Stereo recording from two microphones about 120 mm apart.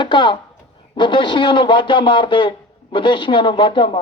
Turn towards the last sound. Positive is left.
turn(degrees=40)  # may be behind; listen again after turning